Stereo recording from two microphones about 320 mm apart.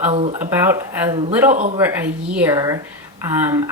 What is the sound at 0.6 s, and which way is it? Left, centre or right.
Speech, centre.